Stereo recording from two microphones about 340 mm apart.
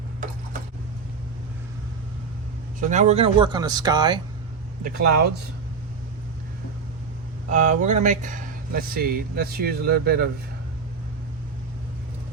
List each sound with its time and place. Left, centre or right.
2.8 s speech: right
4.8 s speech: right
7.5 s speech: right